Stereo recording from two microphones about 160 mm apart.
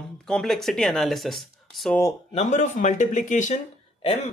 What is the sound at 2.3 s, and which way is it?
Speech, 50° left (ahead or behind).